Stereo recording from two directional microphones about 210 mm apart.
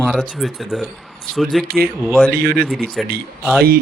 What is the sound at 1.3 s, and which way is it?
Speech, 45° right (ahead or behind).